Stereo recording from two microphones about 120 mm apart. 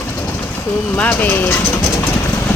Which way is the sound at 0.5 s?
10° left (ahead or behind).